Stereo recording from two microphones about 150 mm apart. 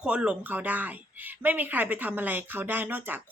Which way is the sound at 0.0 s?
5° right (ahead or behind).